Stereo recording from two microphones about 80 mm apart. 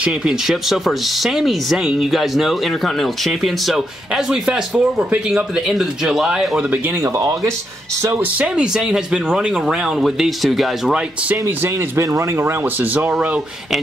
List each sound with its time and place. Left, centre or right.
0.0 s speech: centre
7.0 s speech: right
8.2 s speech: centre
11.4 s speech: right
12.0 s speech: right; by 13.4 s centre